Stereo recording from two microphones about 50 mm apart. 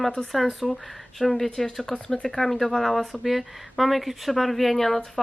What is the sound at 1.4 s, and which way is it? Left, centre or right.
Speech, centre.